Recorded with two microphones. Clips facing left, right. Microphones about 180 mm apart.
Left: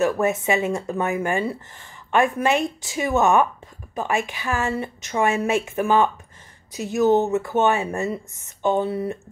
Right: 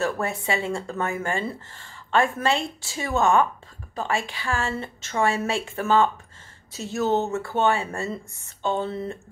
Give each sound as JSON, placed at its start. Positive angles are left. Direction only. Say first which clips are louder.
{"t": 0.0, "sound": "a woman's voice", "louder": "left 6 dB", "side_deg": 20}